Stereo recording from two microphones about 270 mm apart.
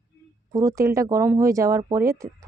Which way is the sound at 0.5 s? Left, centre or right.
Centre.